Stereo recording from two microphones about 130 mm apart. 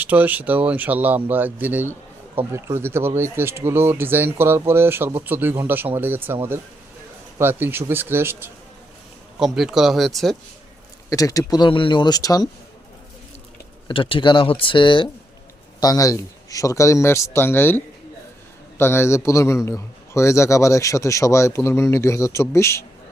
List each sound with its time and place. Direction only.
0.0 s speech: 15° right (ahead or behind)
9.4 s a man's voice: 5° right (ahead or behind)
11.1 s speech: 25° left (ahead or behind)
13.8 s speech: 40° left (ahead or behind)
15.8 s a man's voice: 30° left (ahead or behind)